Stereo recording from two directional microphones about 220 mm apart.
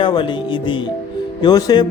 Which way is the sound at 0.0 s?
20° left (ahead or behind).